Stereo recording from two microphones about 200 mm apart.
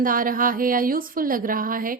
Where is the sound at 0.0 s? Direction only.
45° right (ahead or behind).